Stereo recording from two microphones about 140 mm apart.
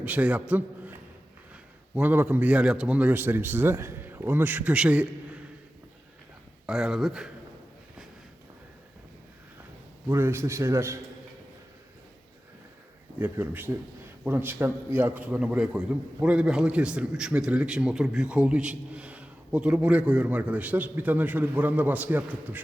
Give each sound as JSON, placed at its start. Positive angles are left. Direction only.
{"t": 0.0, "sound": "a man's voice", "side_deg": -10}
{"t": 2.0, "sound": "a man's voice", "side_deg": -10}
{"t": 6.7, "sound": "speech", "side_deg": -5}
{"t": 10.1, "sound": "a man's voice", "side_deg": -15}
{"t": 13.1, "sound": "a man's voice", "side_deg": -15}